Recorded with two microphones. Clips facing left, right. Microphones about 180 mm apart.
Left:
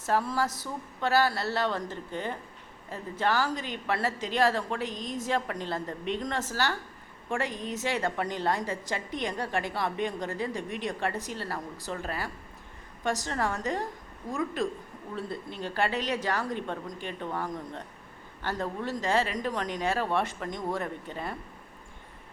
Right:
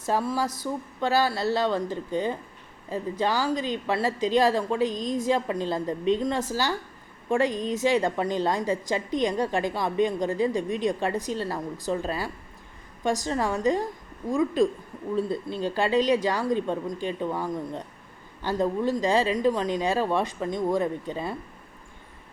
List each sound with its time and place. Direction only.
0.0 s a woman's voice: 15° right (ahead or behind)